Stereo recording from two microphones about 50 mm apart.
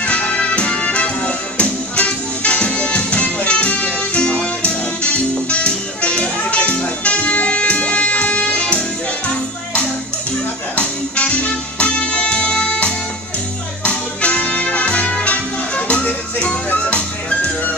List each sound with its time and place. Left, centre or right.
0.0 s music: left
10.8 s music: left